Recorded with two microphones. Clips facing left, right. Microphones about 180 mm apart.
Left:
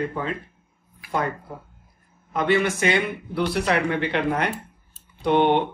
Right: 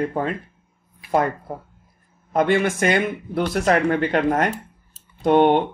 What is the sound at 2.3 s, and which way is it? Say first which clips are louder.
Speech: right 3 dB; 45° right (ahead or behind).